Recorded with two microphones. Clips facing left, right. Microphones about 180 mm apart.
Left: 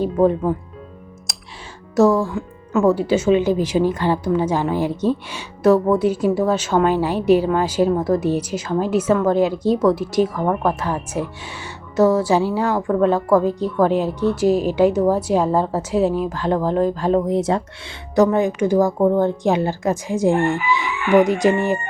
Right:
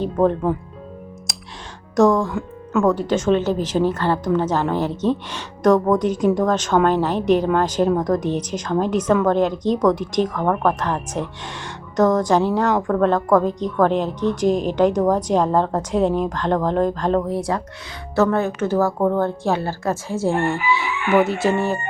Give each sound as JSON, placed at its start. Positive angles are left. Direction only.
{"t": 0.0, "sound": "speech", "side_deg": 10}
{"t": 1.3, "sound": "music", "side_deg": 0}
{"t": 2.0, "sound": "speech", "side_deg": 5}